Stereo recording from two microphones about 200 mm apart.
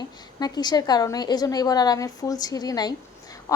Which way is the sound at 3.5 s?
15° left (ahead or behind).